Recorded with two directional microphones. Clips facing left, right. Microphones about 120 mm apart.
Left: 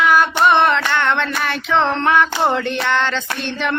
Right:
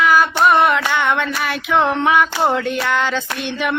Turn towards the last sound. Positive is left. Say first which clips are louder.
# even
turn(degrees=-10)  # may be behind; listen again after turning